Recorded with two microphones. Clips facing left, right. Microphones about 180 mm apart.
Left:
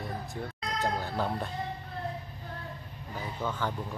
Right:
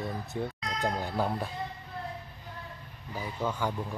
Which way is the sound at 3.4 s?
10° right (ahead or behind).